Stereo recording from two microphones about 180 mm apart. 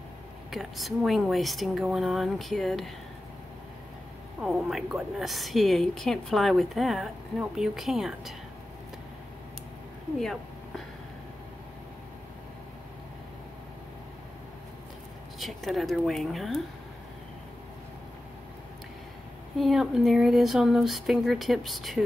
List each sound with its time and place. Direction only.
0.5 s a woman's voice: centre (ahead or behind)
4.4 s a woman's voice: centre (ahead or behind)
10.1 s a woman's voice: centre (ahead or behind)
15.3 s a woman's voice: centre (ahead or behind)
19.6 s a woman's voice: centre (ahead or behind)